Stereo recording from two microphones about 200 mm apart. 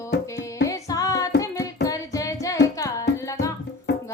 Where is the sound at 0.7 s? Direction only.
15° left (ahead or behind).